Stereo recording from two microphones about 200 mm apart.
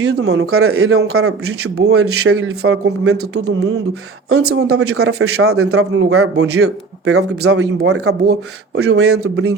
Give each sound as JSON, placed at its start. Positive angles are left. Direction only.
{"t": 0.0, "sound": "speech", "side_deg": -60}
{"t": 4.4, "sound": "speech", "side_deg": -55}
{"t": 4.7, "sound": "speech", "side_deg": -90}
{"t": 8.3, "sound": "speech", "side_deg": -55}